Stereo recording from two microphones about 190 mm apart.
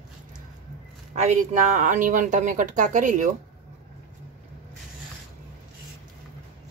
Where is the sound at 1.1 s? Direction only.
40° right (ahead or behind).